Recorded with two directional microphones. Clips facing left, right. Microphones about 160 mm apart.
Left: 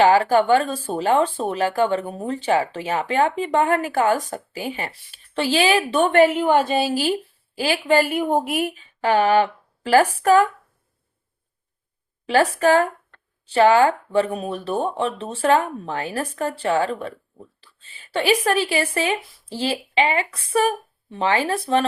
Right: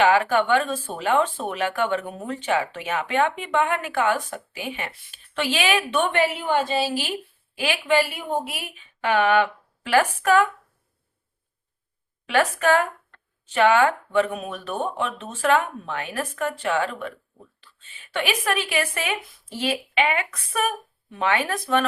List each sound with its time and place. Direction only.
0.0 s speech: 35° left (ahead or behind)
12.2 s speech: 35° left (ahead or behind)